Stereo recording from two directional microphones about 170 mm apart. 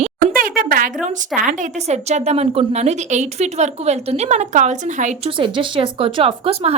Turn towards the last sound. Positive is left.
turn(degrees=-35)  # may be behind; listen again after turning